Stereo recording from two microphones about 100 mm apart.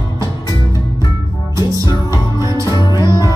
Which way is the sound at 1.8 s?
40° left (ahead or behind).